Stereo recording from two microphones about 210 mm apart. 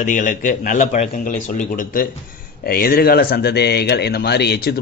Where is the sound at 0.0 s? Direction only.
40° left (ahead or behind).